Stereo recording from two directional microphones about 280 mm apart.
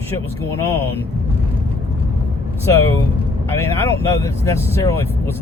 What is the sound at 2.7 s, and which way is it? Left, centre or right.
Speech, centre.